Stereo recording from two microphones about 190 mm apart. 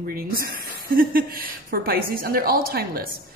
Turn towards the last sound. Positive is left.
turn(degrees=-55)  # may be behind; listen again after turning